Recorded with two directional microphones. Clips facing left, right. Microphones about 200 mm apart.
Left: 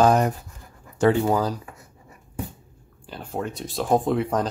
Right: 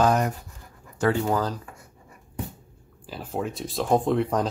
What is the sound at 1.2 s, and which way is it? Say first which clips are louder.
Speech: left 3 dB; 10° left (ahead or behind).